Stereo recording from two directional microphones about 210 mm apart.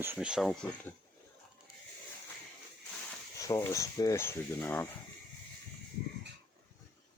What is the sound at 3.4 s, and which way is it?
Speech, 15° left (ahead or behind).